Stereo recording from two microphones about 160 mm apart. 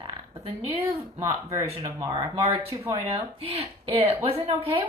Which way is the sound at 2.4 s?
40° right (ahead or behind).